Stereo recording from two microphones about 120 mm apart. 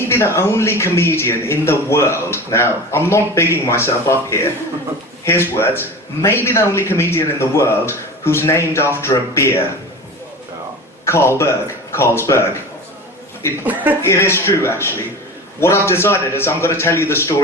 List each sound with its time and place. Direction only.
0.1 s speech: 20° left (ahead or behind)
11.0 s speech: 20° left (ahead or behind)
14.0 s speech: 20° left (ahead or behind)